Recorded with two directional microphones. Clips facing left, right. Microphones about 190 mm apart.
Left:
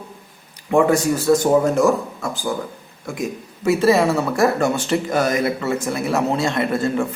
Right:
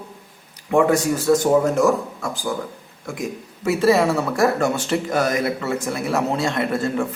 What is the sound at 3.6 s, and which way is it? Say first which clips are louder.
Speech: left 1 dB; 25° left (ahead or behind).